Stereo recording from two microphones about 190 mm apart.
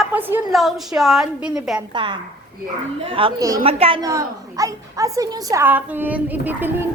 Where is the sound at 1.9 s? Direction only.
25° right (ahead or behind).